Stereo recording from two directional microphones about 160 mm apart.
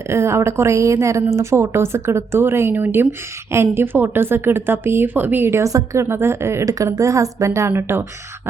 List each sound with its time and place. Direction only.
0.1 s speech: 15° right (ahead or behind)